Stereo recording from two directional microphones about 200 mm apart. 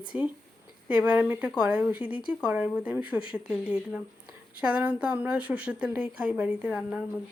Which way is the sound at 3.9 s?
5° right (ahead or behind).